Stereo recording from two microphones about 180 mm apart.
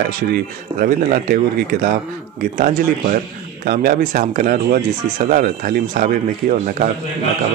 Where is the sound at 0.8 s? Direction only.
50° right (ahead or behind).